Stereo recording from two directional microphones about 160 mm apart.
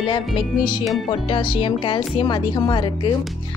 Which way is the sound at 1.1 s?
30° left (ahead or behind).